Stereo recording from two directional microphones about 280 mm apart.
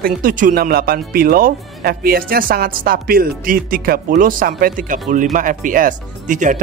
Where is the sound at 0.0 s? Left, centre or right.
Right.